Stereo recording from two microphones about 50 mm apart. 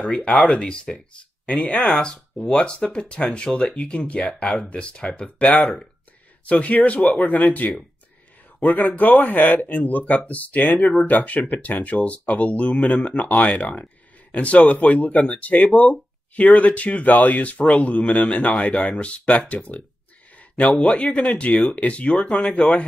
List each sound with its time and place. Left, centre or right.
0.0 s speech: left
1.8 s speech: centre
20.6 s speech: centre
20.9 s speech: left